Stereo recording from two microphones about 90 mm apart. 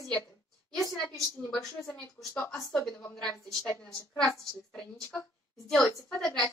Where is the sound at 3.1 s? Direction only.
5° left (ahead or behind).